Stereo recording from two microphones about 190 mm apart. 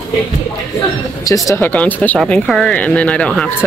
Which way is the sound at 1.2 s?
15° left (ahead or behind).